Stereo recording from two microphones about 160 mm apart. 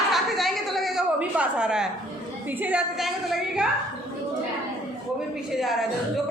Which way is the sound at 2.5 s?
10° right (ahead or behind).